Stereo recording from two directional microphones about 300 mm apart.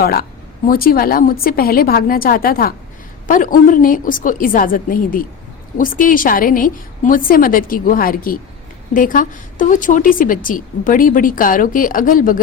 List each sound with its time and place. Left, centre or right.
0.0 s a woman's voice: left